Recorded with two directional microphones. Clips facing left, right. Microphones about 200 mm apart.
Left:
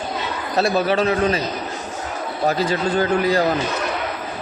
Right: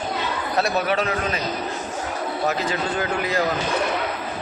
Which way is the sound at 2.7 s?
35° left (ahead or behind).